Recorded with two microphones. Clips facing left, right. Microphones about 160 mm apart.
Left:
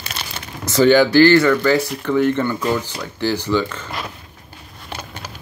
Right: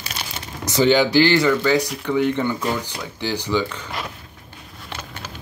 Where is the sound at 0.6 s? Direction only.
15° right (ahead or behind).